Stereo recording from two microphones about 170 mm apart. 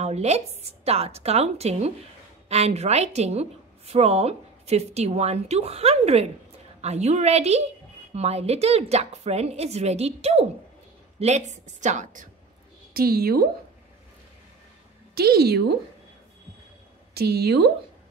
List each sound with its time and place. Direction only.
0.0 s a woman's voice: 40° right (ahead or behind)
12.9 s a woman's voice: 60° right (ahead or behind)
15.1 s speech: 65° right (ahead or behind)
17.1 s speech: 65° right (ahead or behind)